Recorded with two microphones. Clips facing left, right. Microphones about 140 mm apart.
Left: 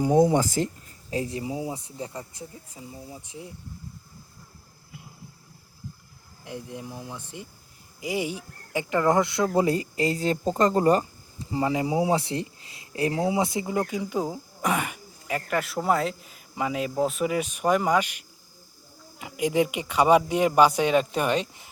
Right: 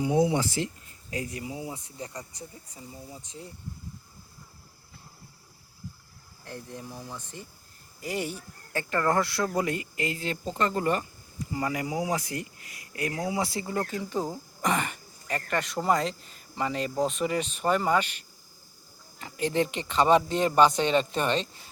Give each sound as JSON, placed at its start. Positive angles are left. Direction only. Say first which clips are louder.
{"t": 0.0, "sound": "speech", "louder": "left 4 dB", "side_deg": 45}
{"t": 1.1, "sound": "speech", "louder": "left 5 dB", "side_deg": 25}
{"t": 2.7, "sound": "speech", "louder": "left 2 dB", "side_deg": 5}
{"t": 6.4, "sound": "speech", "louder": "left 4 dB", "side_deg": 10}
{"t": 19.2, "sound": "speech", "louder": "left 3 dB", "side_deg": 10}